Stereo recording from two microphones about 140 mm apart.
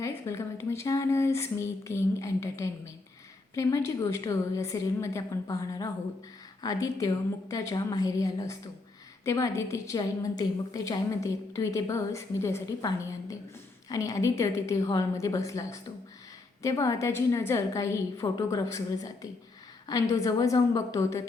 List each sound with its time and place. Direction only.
0.0 s a woman's voice: 20° left (ahead or behind)